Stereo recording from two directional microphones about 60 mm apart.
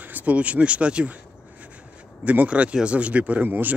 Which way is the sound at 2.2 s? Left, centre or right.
Right.